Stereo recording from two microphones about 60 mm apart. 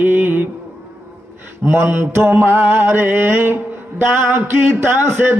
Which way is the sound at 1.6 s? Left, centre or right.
Right.